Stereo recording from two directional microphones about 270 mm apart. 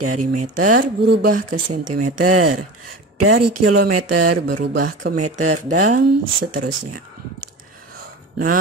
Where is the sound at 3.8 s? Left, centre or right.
Right.